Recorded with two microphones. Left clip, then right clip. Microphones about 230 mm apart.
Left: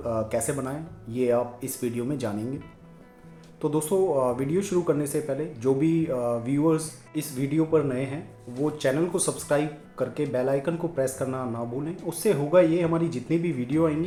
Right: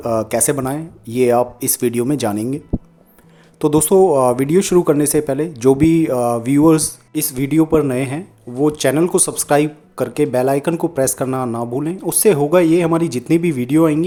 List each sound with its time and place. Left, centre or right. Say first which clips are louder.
0.0 s speech: right 9 dB; right
3.6 s speech: right 12 dB; right